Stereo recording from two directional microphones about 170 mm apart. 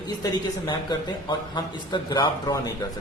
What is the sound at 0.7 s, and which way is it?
A man's voice, 25° left (ahead or behind).